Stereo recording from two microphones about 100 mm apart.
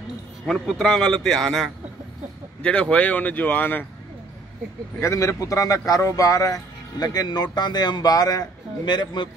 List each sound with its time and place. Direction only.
0.5 s a man's voice: centre (ahead or behind); by 3.8 s 20° left (ahead or behind)
5.0 s a man's voice: 30° left (ahead or behind); by 9.3 s 50° left (ahead or behind)